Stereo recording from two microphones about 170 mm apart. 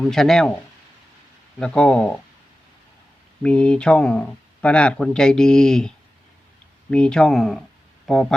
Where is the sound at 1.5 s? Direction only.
5° left (ahead or behind).